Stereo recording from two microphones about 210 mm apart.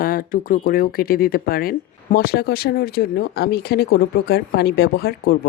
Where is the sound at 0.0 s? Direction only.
45° left (ahead or behind).